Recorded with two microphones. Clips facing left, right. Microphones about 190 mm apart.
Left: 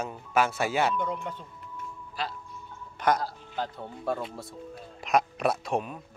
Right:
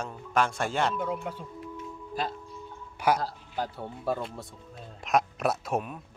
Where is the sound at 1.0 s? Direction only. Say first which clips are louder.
Right 1 dB; 5° right (ahead or behind).